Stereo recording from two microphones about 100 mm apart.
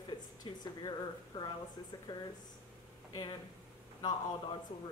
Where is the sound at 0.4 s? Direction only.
45° left (ahead or behind).